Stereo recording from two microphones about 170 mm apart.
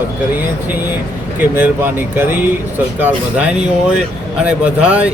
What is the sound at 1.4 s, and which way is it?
Speech, 10° right (ahead or behind).